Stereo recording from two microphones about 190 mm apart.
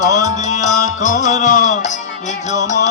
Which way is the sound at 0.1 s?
40° left (ahead or behind).